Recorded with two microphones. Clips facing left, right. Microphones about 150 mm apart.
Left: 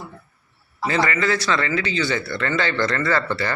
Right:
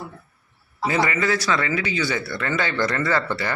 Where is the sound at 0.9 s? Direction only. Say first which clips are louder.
Left 1 dB; 10° right (ahead or behind).